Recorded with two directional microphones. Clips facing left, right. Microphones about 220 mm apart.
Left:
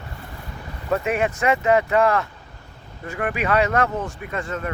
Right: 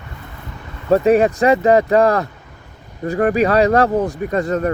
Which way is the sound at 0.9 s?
35° right (ahead or behind).